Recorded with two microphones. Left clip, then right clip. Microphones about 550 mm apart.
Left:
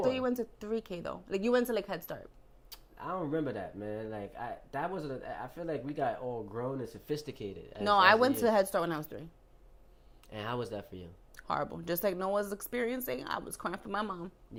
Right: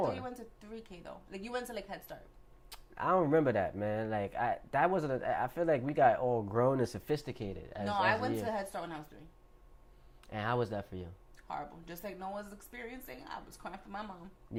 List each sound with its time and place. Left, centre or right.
0.0 s speech: left
2.6 s speech: right
7.1 s speech: centre
7.9 s speech: left
10.2 s speech: centre
11.3 s speech: left